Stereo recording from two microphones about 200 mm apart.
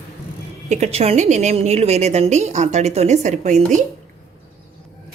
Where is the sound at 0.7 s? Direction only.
30° right (ahead or behind).